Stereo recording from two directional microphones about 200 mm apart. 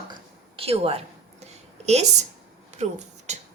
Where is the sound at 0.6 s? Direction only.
30° right (ahead or behind).